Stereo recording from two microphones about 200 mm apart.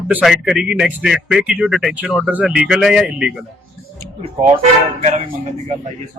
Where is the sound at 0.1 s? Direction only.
Centre (ahead or behind).